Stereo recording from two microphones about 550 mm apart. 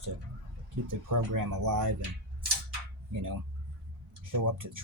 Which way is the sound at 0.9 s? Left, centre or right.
Right.